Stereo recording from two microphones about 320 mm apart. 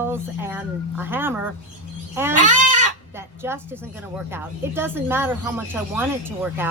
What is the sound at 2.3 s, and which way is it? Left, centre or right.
Goat, right.